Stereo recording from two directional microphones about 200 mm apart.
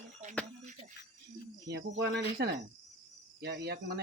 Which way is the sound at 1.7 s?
55° right (ahead or behind).